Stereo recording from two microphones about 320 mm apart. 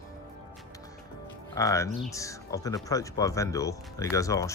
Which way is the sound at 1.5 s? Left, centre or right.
Centre.